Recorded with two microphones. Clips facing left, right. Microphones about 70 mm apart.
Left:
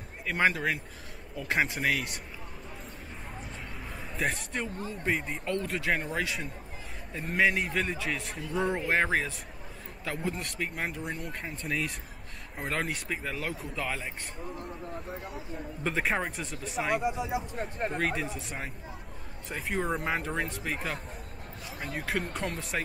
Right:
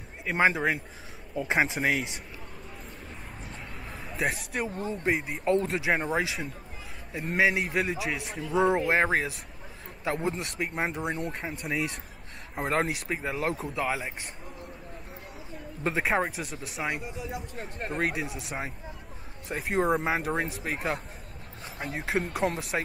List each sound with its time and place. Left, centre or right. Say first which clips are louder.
0.2 s speech: right 3 dB; centre
4.1 s a man's voice: right 2 dB; centre
4.7 s speech: right 3 dB; centre
5.4 s speech: right 7 dB; right
5.7 s speech: right 3 dB; centre
7.2 s speech: right 1 dB; centre
11.5 s speech: even; centre
12.5 s speech: right 5 dB; right
13.7 s speech: right 4 dB; centre
15.8 s speech: right 3 dB; centre
17.0 s speech: left 6 dB; left
18.0 s speech: right 1 dB; centre
19.5 s speech: right 5 dB; centre
21.8 s speech: right 3 dB; right